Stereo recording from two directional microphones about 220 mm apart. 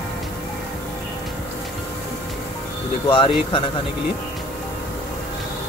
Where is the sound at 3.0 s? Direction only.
25° left (ahead or behind).